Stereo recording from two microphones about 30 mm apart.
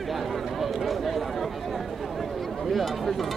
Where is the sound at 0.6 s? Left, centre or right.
Centre.